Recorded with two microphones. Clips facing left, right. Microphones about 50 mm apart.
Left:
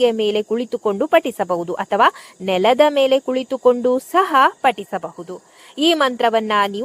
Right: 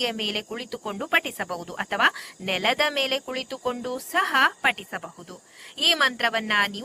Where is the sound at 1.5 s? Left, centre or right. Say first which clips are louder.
Left 12 dB; centre.